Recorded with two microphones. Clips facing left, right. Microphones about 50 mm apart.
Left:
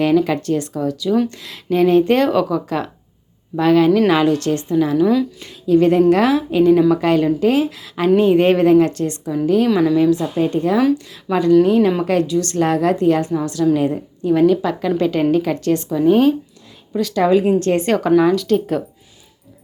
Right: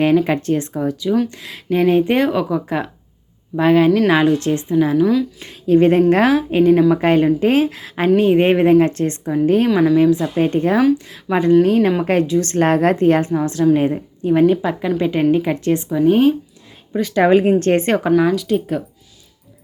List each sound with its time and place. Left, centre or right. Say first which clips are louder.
0.0 s a woman's voice: right 1 dB; right
5.6 s a woman's voice: even; right
8.1 s a woman's voice: even; centre
9.6 s speech: right 1 dB; centre
10.0 s a woman's voice: right 1 dB; right
10.3 s a woman's voice: right 1 dB; right; by 11.9 s centre
12.0 s a woman's voice: right 1 dB; right; by 16.0 s centre
16.0 s a woman's voice: even; right
17.2 s a woman's voice: right 1 dB; right
18.1 s speech: left 3 dB; centre